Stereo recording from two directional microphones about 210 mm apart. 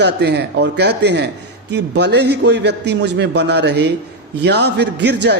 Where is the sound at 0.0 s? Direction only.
55° right (ahead or behind).